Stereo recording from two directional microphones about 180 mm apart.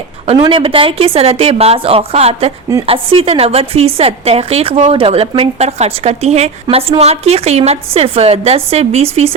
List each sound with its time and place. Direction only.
0.4 s a woman's voice: 30° right (ahead or behind)